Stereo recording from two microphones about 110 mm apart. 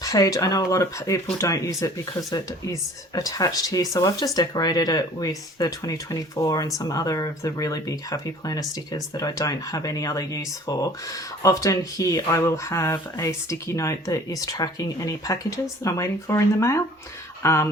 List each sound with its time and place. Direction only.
0.0 s speech: 30° left (ahead or behind)